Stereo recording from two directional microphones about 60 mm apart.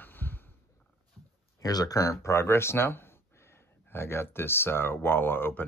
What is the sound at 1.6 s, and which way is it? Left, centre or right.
Speech, left.